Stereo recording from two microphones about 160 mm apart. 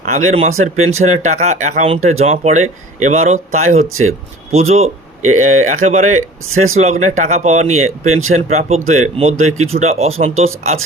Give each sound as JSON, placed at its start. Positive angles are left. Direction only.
{"t": 0.1, "sound": "speech", "side_deg": -45}